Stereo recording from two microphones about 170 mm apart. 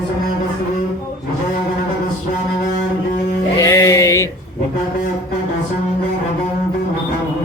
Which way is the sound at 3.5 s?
20° left (ahead or behind).